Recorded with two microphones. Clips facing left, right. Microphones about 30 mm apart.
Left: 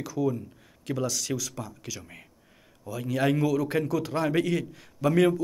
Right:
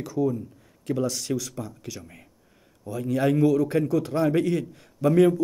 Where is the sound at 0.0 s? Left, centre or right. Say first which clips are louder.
Right 2 dB; left.